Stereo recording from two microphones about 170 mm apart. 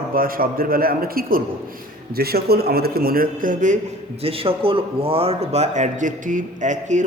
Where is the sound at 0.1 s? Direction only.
60° right (ahead or behind).